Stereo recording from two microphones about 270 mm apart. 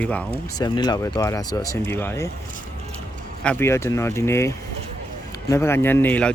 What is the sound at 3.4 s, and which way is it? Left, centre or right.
Speech, centre.